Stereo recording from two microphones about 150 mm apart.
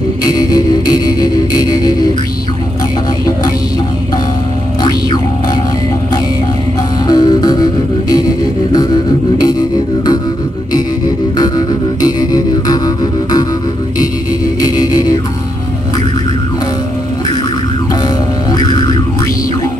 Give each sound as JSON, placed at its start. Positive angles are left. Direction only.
{"t": 0.3, "sound": "music", "side_deg": 25}
{"t": 7.1, "sound": "music", "side_deg": 30}
{"t": 11.3, "sound": "music", "side_deg": 25}
{"t": 18.6, "sound": "music", "side_deg": 25}